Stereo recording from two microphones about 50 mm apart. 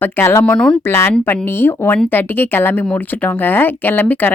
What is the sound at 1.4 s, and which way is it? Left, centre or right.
A woman's voice, left.